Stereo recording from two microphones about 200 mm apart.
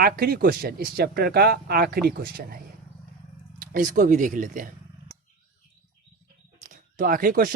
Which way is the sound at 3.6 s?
40° right (ahead or behind).